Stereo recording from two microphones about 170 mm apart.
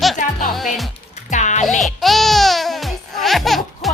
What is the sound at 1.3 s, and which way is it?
Music, 45° left (ahead or behind).